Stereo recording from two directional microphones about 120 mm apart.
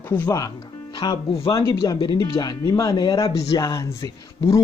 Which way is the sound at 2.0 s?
40° left (ahead or behind).